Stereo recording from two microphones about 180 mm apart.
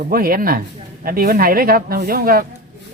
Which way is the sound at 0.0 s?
55° right (ahead or behind).